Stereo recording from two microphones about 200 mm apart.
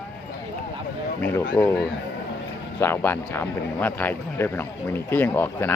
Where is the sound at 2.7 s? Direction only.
10° left (ahead or behind).